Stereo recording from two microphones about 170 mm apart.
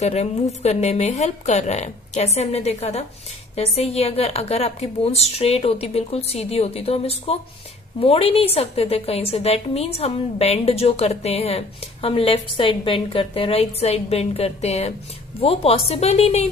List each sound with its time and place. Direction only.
0.0 s a woman's voice: 40° left (ahead or behind)